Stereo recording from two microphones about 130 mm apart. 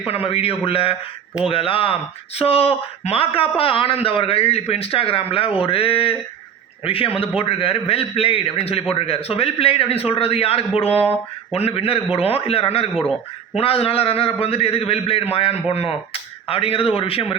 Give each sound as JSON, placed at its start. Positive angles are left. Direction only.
{"t": 0.0, "sound": "a man's voice", "side_deg": 45}
{"t": 12.9, "sound": "a man's voice", "side_deg": -5}
{"t": 13.6, "sound": "a man's voice", "side_deg": 50}